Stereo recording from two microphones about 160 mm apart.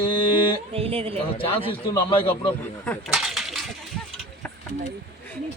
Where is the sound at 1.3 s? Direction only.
35° left (ahead or behind).